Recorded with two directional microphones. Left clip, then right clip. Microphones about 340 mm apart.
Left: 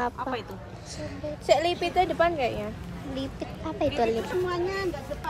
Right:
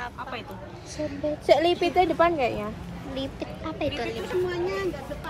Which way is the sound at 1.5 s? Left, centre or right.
Centre.